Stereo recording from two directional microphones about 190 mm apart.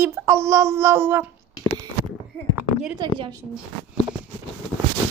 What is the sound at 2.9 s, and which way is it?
Speech, 25° right (ahead or behind).